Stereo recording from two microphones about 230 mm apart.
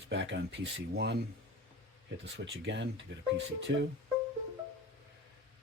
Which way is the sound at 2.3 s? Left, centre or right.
Right.